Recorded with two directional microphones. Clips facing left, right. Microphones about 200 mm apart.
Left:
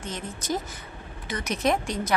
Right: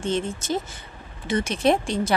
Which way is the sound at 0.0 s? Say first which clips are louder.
Right 9 dB; 25° right (ahead or behind).